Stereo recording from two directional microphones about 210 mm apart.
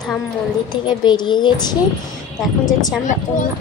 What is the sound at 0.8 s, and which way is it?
Speech, 20° left (ahead or behind).